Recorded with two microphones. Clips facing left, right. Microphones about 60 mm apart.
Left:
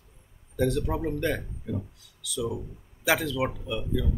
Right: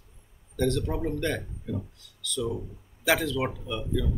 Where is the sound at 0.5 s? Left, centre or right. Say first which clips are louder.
Left 1 dB; centre.